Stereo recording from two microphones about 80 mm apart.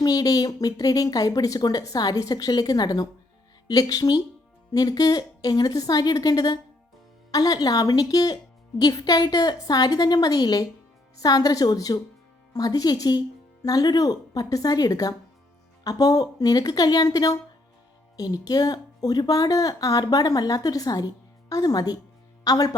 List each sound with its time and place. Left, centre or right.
0.0 s a woman's voice: left